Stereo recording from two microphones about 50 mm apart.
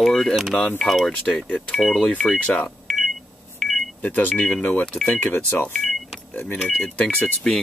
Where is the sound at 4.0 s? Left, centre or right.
Left.